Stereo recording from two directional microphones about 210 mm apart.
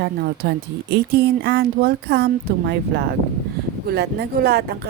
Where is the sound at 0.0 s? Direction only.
50° right (ahead or behind).